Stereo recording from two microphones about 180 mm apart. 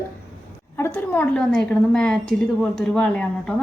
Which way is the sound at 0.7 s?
15° left (ahead or behind).